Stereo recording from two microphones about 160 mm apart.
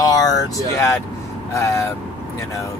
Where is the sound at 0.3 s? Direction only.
15° left (ahead or behind).